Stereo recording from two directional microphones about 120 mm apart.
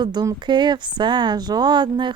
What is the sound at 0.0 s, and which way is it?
Speech, 35° right (ahead or behind).